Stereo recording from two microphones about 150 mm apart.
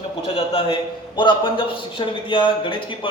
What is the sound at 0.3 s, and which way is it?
A man's voice, 35° left (ahead or behind).